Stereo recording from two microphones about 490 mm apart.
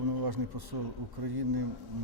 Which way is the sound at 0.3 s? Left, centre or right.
Right.